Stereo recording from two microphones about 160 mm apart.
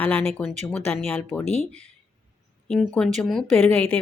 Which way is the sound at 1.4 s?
40° left (ahead or behind).